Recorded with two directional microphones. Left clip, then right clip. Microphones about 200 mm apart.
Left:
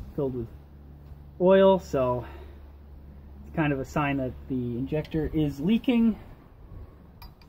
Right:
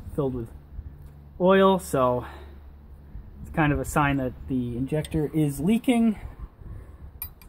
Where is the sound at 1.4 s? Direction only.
40° right (ahead or behind).